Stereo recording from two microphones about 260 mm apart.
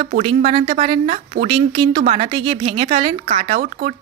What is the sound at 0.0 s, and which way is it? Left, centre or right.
A woman's voice, right.